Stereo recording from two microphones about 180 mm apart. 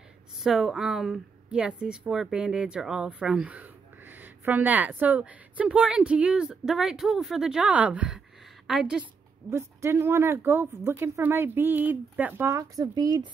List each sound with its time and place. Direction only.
0.4 s a woman's voice: centre (ahead or behind)
9.5 s speech: 15° right (ahead or behind)